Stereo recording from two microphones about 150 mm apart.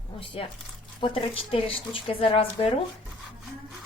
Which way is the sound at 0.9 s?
35° left (ahead or behind).